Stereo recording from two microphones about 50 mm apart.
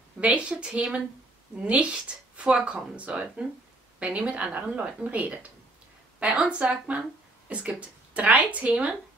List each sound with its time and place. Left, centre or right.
0.2 s a woman's voice: right